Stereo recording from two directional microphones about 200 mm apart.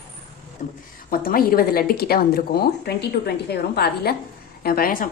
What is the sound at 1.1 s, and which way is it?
Speech, 45° left (ahead or behind).